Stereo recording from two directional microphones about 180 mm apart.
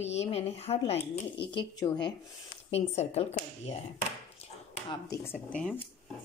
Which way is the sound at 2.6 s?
35° left (ahead or behind).